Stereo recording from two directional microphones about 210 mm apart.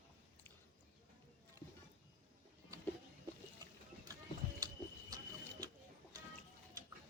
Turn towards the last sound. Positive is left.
turn(degrees=-15)  # may be behind; listen again after turning